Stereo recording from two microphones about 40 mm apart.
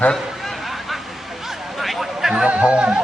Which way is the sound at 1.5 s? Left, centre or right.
Centre.